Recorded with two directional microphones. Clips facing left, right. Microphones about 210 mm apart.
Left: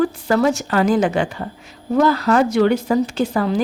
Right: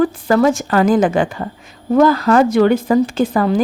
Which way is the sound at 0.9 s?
50° right (ahead or behind).